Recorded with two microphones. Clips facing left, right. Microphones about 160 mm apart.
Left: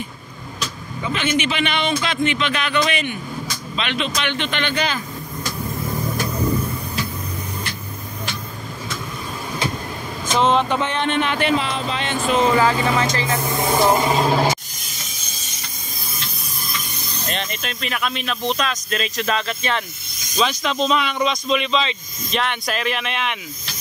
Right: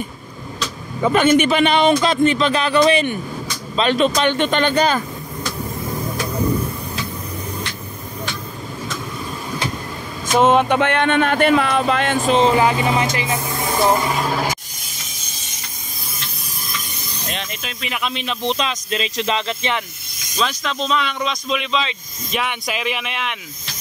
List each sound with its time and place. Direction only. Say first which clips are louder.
1.0 s speech: right 8 dB; 45° right (ahead or behind)
10.4 s speech: right 4 dB; 50° right (ahead or behind)
12.3 s speech: right 1 dB; 25° right (ahead or behind)
14.0 s music: left 3 dB; 25° left (ahead or behind)
17.3 s speech: left 2 dB; 5° right (ahead or behind); by 19.8 s 20° right (ahead or behind)
20.3 s speech: left 2 dB; 5° left (ahead or behind)